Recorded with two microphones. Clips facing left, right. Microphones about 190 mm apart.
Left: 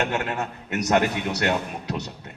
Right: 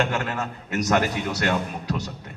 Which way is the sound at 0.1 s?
20° left (ahead or behind).